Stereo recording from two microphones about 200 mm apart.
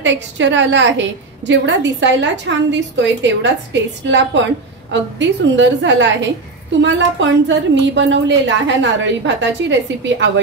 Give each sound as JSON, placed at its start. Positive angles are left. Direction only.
{"t": 0.0, "sound": "a woman's voice", "side_deg": -65}